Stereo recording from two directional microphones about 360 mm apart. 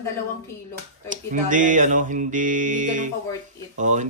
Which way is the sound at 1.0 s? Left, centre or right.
Right.